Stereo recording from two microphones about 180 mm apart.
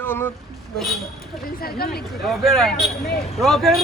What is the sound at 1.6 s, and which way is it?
Speech, 60° left (ahead or behind).